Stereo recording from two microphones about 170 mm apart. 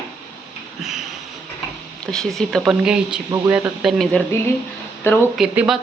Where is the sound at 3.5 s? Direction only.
5° right (ahead or behind).